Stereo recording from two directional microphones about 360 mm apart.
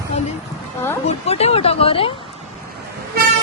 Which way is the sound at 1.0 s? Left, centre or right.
Centre.